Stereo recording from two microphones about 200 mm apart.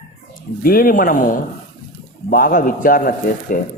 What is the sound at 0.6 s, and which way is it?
Speech, 45° left (ahead or behind).